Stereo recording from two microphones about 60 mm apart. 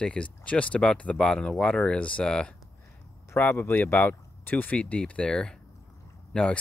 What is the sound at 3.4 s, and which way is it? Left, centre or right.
Speech, left.